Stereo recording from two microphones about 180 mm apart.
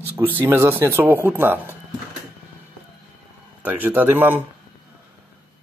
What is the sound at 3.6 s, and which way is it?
Speech, 10° right (ahead or behind).